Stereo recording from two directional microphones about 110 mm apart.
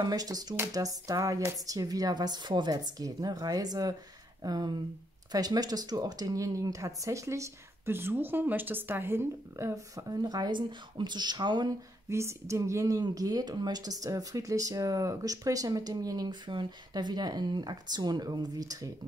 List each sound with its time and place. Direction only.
0.0 s speech: 35° right (ahead or behind)
12.1 s speech: 25° right (ahead or behind)